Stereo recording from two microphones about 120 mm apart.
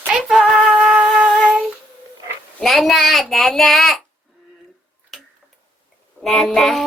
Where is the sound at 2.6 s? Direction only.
Centre (ahead or behind).